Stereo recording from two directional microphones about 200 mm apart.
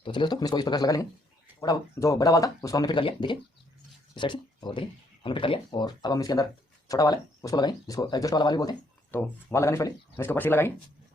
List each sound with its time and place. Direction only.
0.0 s speech: 25° left (ahead or behind)